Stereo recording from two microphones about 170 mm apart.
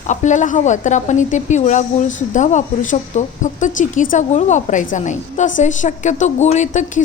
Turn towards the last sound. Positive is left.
turn(degrees=45)  # may be behind; listen again after turning